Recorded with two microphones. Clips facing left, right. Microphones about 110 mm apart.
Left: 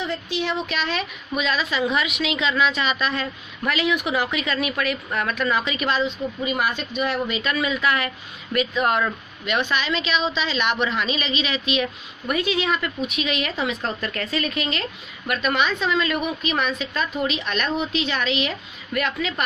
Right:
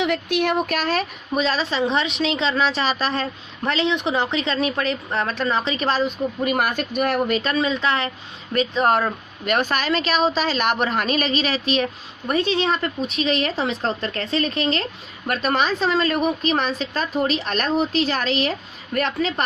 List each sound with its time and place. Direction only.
0.0 s speech: 65° right (ahead or behind); by 6.0 s 35° right (ahead or behind)
6.0 s speech: 50° right (ahead or behind)
7.4 s speech: 30° right (ahead or behind)